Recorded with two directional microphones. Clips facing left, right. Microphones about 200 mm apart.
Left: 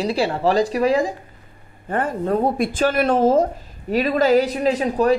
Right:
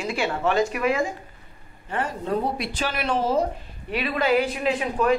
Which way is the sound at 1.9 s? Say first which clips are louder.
Left 6 dB; 50° left (ahead or behind).